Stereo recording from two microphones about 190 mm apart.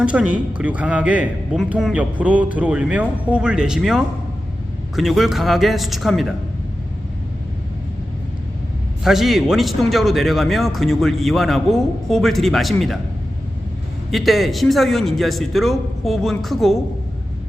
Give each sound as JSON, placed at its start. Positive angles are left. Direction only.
{"t": 0.0, "sound": "a man's voice", "side_deg": -5}
{"t": 9.0, "sound": "a man's voice", "side_deg": 0}
{"t": 14.1, "sound": "a man's voice", "side_deg": 0}